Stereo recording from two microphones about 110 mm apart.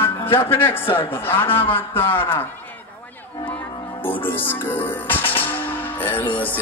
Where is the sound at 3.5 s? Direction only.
15° left (ahead or behind).